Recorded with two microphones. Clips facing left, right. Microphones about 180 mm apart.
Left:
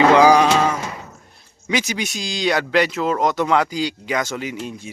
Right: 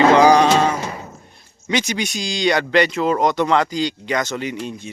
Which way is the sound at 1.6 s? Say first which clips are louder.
Right 1 dB; 5° left (ahead or behind).